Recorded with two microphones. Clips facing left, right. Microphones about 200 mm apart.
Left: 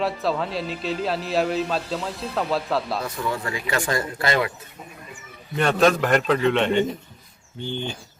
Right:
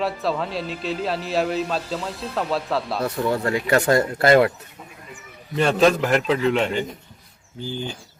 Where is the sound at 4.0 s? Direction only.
50° right (ahead or behind).